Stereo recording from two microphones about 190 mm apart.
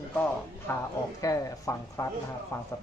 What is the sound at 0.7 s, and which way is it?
Speech, 10° left (ahead or behind).